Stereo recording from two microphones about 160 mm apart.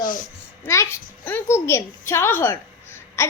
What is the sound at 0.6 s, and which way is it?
A woman's voice, 15° left (ahead or behind).